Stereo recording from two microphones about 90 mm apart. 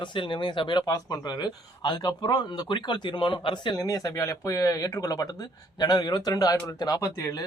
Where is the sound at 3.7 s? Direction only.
40° left (ahead or behind).